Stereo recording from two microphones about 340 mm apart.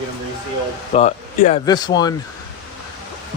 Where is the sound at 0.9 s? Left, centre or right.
Centre.